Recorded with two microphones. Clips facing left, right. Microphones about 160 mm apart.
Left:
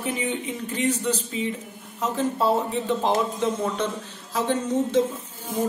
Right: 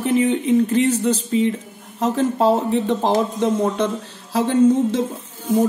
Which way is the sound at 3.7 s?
65° right (ahead or behind).